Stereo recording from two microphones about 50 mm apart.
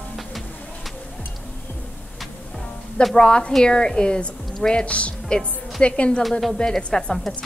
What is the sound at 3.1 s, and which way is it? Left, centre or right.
A woman's voice, centre.